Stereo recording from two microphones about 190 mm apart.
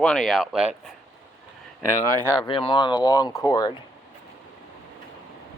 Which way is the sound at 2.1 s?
20° right (ahead or behind).